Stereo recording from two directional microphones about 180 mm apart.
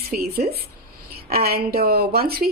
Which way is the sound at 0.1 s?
55° right (ahead or behind).